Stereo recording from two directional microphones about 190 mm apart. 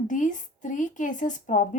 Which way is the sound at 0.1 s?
40° left (ahead or behind).